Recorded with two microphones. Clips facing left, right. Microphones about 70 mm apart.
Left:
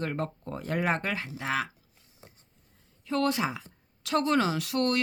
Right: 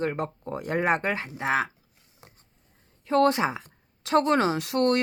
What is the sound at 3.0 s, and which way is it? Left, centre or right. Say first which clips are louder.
Speech: right 6 dB; right.